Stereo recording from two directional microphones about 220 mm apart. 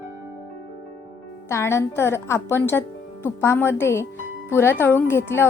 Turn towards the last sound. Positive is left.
turn(degrees=10)  # may be behind; listen again after turning